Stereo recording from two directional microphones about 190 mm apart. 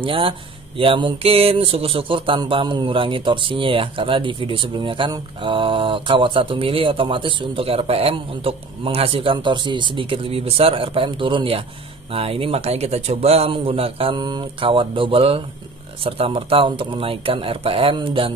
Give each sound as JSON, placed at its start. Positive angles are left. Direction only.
{"t": 0.0, "sound": "speech", "side_deg": -30}